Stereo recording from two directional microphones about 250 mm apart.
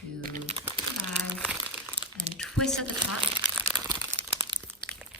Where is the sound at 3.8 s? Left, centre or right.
Centre.